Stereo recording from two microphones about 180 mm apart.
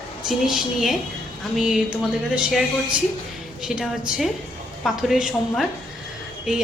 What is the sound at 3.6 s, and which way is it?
A woman's voice, centre (ahead or behind).